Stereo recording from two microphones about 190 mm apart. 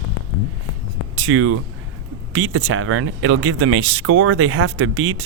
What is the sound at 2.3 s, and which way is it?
Speech, 90° right.